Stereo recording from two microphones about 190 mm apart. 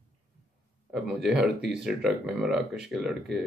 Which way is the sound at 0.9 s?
5° right (ahead or behind).